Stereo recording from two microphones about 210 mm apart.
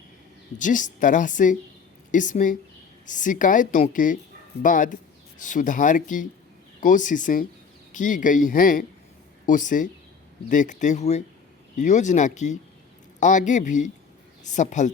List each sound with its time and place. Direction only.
0.6 s a woman's voice: 35° left (ahead or behind)